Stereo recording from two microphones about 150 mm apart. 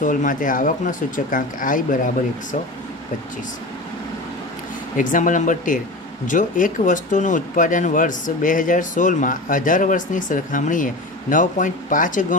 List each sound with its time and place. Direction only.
0.0 s speech: 60° left (ahead or behind)
4.9 s speech: 60° left (ahead or behind)